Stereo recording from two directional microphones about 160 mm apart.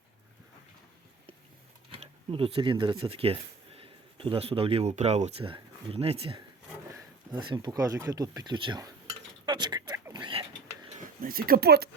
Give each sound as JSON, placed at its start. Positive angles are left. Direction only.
{"t": 1.9, "sound": "speech", "side_deg": -35}
{"t": 9.5, "sound": "a sound", "side_deg": -25}
{"t": 10.9, "sound": "speech", "side_deg": -65}